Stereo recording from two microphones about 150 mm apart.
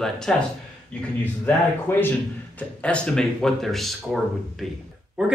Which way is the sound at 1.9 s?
15° left (ahead or behind).